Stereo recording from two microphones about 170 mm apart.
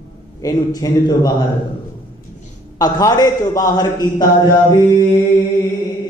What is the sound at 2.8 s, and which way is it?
A man's voice, 20° left (ahead or behind).